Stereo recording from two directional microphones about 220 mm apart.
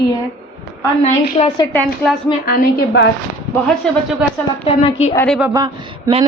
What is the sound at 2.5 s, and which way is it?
Speech, 50° left (ahead or behind).